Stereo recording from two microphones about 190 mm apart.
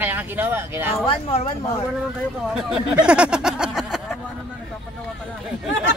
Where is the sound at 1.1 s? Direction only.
30° left (ahead or behind).